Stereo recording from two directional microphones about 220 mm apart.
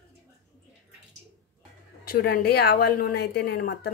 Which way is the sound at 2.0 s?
40° left (ahead or behind).